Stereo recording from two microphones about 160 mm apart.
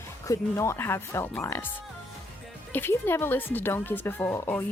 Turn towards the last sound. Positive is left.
turn(degrees=10)  # may be behind; listen again after turning